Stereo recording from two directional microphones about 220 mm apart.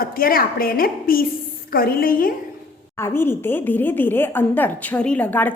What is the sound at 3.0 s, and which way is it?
Speech, 10° left (ahead or behind).